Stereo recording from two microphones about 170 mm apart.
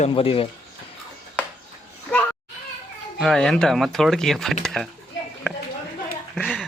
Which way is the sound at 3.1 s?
Centre (ahead or behind).